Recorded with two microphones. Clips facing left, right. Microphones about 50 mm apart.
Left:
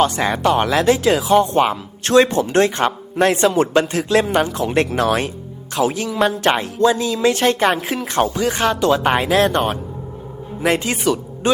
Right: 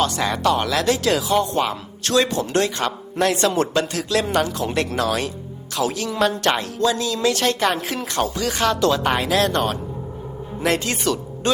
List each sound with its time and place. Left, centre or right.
0.0 s speech: left